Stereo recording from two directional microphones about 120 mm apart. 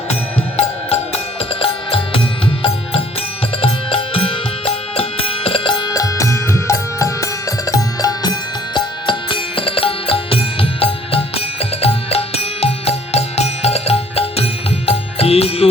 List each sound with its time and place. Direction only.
0.5 s music: 55° left (ahead or behind); by 8.3 s 30° left (ahead or behind)
8.7 s music: 40° left (ahead or behind)